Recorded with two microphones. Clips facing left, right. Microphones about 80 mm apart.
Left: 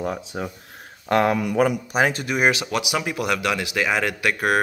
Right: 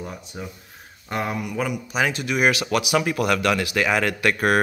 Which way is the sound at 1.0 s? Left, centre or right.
Left.